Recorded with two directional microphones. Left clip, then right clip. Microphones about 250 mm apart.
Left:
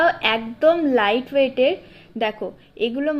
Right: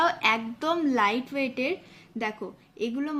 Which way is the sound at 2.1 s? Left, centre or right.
Centre.